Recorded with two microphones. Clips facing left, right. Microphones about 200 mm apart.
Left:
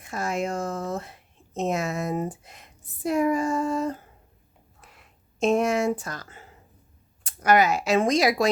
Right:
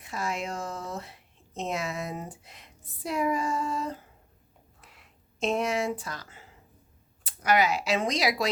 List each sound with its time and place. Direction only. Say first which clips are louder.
0.0 s speech: left 5 dB; 45° left (ahead or behind)